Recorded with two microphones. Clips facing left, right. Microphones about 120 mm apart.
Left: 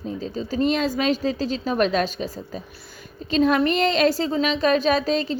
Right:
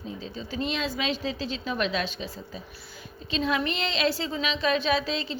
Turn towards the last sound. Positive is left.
turn(degrees=45)  # may be behind; listen again after turning